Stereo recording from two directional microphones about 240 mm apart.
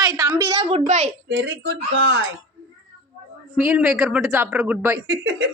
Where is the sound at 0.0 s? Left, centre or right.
Centre.